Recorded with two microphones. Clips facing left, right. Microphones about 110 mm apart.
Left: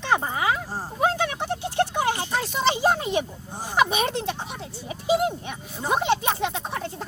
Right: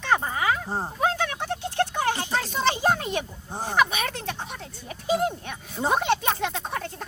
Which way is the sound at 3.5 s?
60° right (ahead or behind).